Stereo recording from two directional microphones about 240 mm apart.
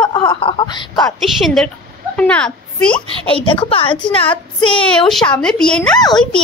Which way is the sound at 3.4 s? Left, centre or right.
Left.